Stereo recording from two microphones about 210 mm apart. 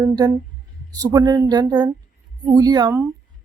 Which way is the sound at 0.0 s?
15° right (ahead or behind).